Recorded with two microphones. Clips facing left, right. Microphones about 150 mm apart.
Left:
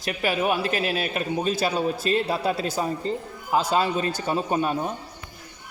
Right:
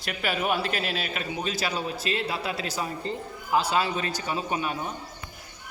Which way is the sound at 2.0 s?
45° left (ahead or behind).